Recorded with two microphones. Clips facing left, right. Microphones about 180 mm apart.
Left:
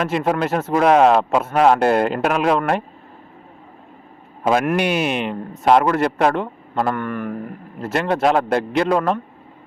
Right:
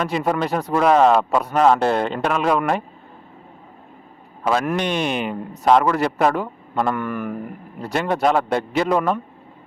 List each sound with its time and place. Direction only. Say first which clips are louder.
0.0 s a man's voice: left 2 dB; 5° left (ahead or behind)
4.6 s a man's voice: left 3 dB; 5° left (ahead or behind)